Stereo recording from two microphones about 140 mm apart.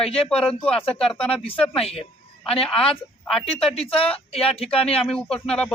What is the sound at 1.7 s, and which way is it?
Speech, 45° left (ahead or behind).